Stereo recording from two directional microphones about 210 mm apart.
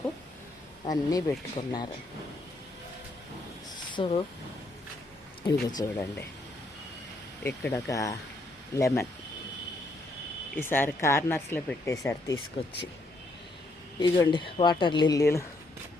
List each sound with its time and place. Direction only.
0.9 s speech: 15° left (ahead or behind)
3.9 s speech: 25° left (ahead or behind)
5.4 s speech: 20° left (ahead or behind)
7.4 s speech: 15° left (ahead or behind)
10.6 s speech: 10° left (ahead or behind)
14.0 s speech: 20° left (ahead or behind)